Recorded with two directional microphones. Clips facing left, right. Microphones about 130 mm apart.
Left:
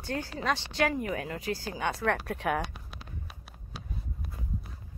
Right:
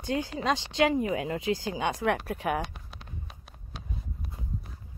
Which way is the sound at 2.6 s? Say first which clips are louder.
Even; 5° left (ahead or behind).